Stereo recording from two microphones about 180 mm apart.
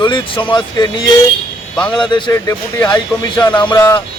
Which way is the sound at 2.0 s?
25° left (ahead or behind).